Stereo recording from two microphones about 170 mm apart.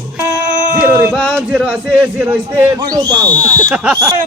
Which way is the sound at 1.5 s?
10° right (ahead or behind).